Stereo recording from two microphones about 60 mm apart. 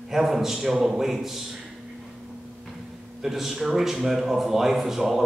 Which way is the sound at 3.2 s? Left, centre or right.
Centre.